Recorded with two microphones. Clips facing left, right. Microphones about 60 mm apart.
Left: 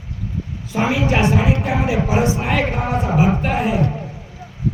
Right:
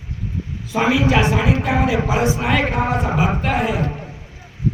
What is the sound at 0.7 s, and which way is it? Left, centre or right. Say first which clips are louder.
Speech: right 2 dB; right.